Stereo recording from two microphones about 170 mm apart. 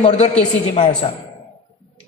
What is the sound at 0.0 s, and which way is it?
A woman's voice, 40° left (ahead or behind).